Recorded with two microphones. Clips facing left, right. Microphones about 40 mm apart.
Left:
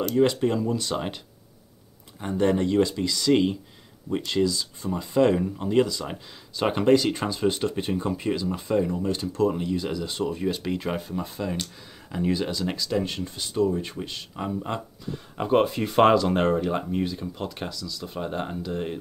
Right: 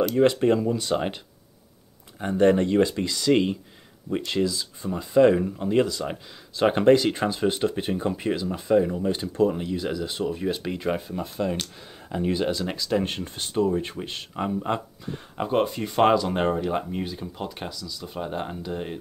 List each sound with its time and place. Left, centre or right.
0.2 s speech: right
0.7 s speech: centre
2.1 s speech: centre
6.0 s speech: centre
6.7 s speech: centre
9.2 s speech: right
9.5 s speech: centre
13.0 s speech: right; by 15.1 s centre
15.3 s speech: centre